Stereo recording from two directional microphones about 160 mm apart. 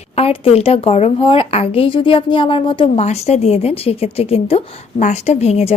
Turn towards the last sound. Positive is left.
turn(degrees=40)  # may be behind; listen again after turning